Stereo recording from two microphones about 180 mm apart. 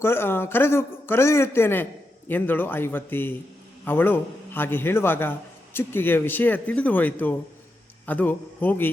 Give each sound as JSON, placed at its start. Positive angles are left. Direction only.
{"t": 0.0, "sound": "a man's voice", "side_deg": 15}